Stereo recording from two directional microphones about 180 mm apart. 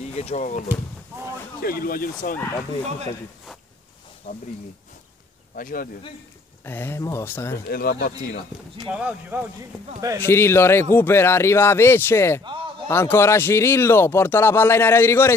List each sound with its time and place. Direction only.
0.0 s speech: 35° left (ahead or behind)
1.6 s speech: 55° left (ahead or behind)
4.2 s speech: 40° left (ahead or behind)
5.6 s speech: 50° left (ahead or behind)
6.6 s speech: 10° left (ahead or behind)
7.6 s speech: 55° left (ahead or behind)
8.7 s speech: 5° right (ahead or behind)
10.2 s speech: 15° left (ahead or behind)